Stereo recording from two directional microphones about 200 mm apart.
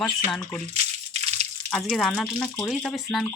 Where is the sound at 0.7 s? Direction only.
30° right (ahead or behind).